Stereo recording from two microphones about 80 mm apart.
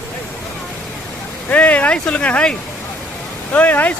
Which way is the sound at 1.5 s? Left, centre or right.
Centre.